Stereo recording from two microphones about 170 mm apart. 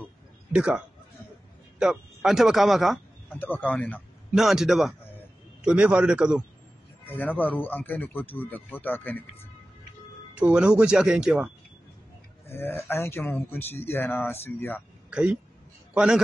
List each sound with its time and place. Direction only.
0.5 s speech: 5° right (ahead or behind)
3.3 s speech: 10° left (ahead or behind)
4.3 s speech: 5° right (ahead or behind)
7.2 s speech: 10° left (ahead or behind)
10.3 s speech: 5° right (ahead or behind)
12.4 s speech: 15° left (ahead or behind)
15.0 s a man's voice: 5° right (ahead or behind)